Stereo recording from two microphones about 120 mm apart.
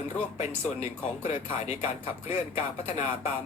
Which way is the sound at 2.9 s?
65° left (ahead or behind).